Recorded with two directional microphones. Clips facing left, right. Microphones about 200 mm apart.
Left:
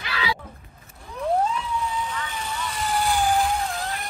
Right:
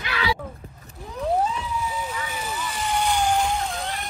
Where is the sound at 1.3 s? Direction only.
5° right (ahead or behind).